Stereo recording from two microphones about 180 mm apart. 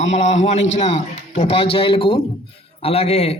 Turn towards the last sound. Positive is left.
turn(degrees=35)  # may be behind; listen again after turning